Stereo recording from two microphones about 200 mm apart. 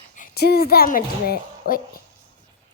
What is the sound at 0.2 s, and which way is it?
A woman's voice, 50° left (ahead or behind).